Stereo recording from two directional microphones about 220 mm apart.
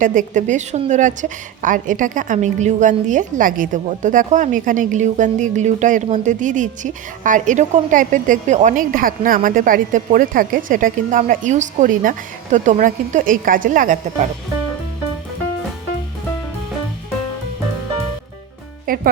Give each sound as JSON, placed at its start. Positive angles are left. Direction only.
{"t": 0.0, "sound": "a woman's voice", "side_deg": -35}
{"t": 18.9, "sound": "a woman's voice", "side_deg": -40}